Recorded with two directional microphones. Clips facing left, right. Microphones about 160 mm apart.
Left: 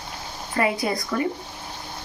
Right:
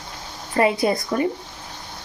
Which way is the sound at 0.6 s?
30° right (ahead or behind).